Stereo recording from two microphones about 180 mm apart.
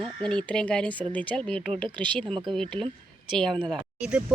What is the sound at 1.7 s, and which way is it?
Speech, 30° right (ahead or behind).